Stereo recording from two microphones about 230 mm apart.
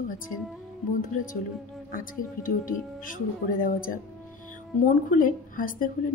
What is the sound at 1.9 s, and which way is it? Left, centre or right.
A woman's voice, left.